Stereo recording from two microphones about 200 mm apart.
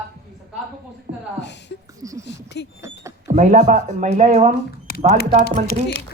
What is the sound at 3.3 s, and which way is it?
Speech, 40° right (ahead or behind).